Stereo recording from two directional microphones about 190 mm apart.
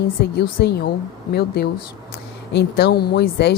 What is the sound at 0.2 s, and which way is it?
Speech, 55° left (ahead or behind).